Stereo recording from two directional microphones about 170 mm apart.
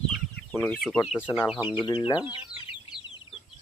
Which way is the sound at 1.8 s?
25° left (ahead or behind).